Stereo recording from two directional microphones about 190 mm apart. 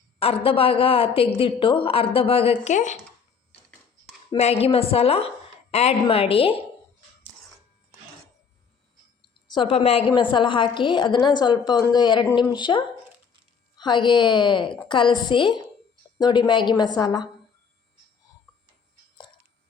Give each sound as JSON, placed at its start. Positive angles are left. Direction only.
{"t": 0.2, "sound": "a woman's voice", "side_deg": 30}
{"t": 4.3, "sound": "a woman's voice", "side_deg": 35}
{"t": 9.5, "sound": "a woman's voice", "side_deg": 30}